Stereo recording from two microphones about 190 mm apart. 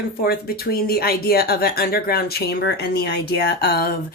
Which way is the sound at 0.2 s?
55° left (ahead or behind).